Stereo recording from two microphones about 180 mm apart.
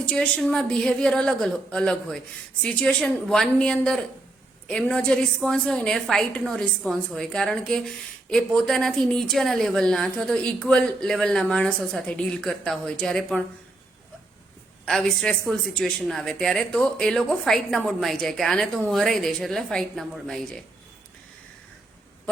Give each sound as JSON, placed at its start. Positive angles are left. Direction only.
{"t": 0.0, "sound": "a woman's voice", "side_deg": 5}
{"t": 14.8, "sound": "a woman's voice", "side_deg": 5}